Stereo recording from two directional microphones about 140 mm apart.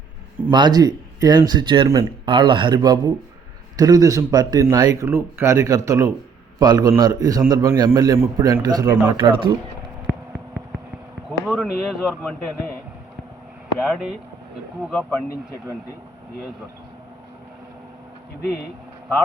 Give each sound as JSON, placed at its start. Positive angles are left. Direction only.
{"t": 0.5, "sound": "a man's voice", "side_deg": -30}
{"t": 11.5, "sound": "speech", "side_deg": 0}
{"t": 13.7, "sound": "speech", "side_deg": 0}